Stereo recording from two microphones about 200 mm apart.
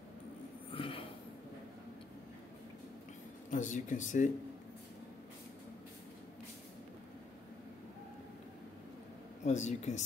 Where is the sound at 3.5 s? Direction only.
40° left (ahead or behind).